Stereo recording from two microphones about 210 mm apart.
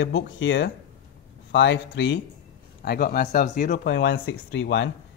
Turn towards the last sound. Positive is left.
turn(degrees=60)  # may be behind; listen again after turning